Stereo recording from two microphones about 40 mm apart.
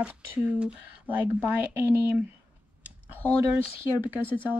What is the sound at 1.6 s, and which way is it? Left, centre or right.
Speech, right.